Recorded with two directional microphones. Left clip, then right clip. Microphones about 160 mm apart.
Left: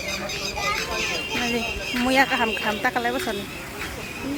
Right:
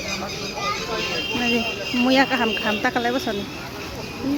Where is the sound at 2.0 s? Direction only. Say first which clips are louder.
Right 1 dB; 15° right (ahead or behind).